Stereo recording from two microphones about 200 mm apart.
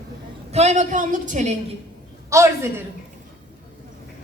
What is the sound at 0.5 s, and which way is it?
A woman's voice, 35° right (ahead or behind).